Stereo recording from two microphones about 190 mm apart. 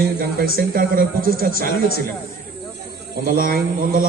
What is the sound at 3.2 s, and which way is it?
Speech, 50° right (ahead or behind).